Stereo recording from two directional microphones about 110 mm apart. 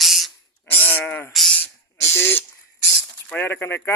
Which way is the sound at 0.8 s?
15° left (ahead or behind).